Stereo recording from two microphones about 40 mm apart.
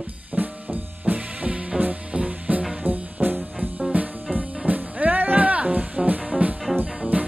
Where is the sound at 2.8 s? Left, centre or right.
Right.